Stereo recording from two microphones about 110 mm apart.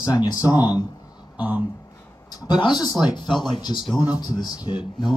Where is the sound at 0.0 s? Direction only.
35° left (ahead or behind).